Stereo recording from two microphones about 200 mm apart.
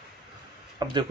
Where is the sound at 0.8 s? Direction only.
20° right (ahead or behind).